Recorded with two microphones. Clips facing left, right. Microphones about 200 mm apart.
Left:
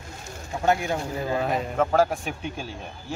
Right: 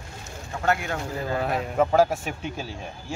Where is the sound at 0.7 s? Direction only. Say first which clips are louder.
Left 2 dB; 15° left (ahead or behind).